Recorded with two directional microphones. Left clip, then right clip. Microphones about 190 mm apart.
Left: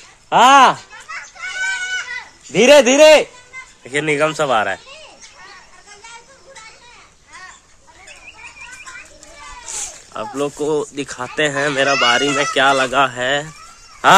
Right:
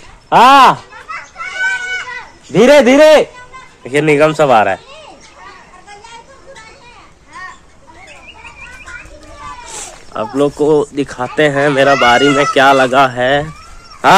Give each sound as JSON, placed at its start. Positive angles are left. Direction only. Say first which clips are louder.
{"t": 0.3, "sound": "a man's voice", "louder": "right 4 dB", "side_deg": 15}
{"t": 1.0, "sound": "a sound", "louder": "right 1 dB", "side_deg": 65}
{"t": 2.5, "sound": "a man's voice", "louder": "right 3 dB", "side_deg": 10}
{"t": 9.7, "sound": "speech", "louder": "right 1 dB", "side_deg": 5}